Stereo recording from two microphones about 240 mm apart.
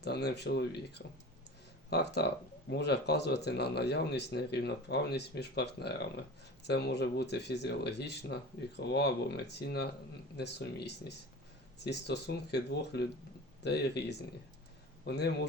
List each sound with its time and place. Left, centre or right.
0.0 s a man's voice: left